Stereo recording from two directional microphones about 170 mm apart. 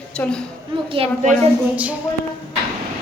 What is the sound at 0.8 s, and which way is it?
Speech, 35° right (ahead or behind).